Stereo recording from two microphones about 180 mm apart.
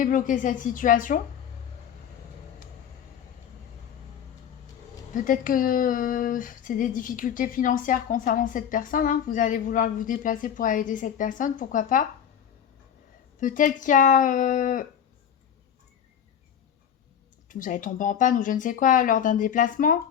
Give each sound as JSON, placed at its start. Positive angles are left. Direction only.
{"t": 0.0, "sound": "speech", "side_deg": 45}
{"t": 5.1, "sound": "speech", "side_deg": 45}
{"t": 13.4, "sound": "speech", "side_deg": 45}
{"t": 17.5, "sound": "speech", "side_deg": 45}